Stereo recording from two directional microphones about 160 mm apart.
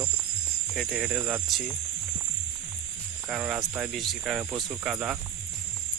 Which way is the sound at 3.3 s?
5° right (ahead or behind).